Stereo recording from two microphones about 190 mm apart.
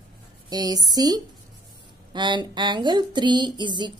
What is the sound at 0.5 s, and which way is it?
A woman's voice, 20° right (ahead or behind).